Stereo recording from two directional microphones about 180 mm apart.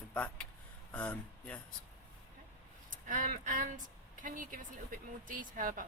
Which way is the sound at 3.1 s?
45° right (ahead or behind).